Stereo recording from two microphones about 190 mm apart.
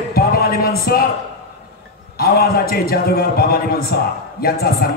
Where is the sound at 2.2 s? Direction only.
55° left (ahead or behind).